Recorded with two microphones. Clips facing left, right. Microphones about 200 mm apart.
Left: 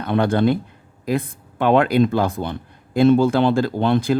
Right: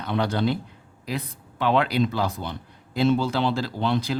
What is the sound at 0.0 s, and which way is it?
Speech, 50° left (ahead or behind).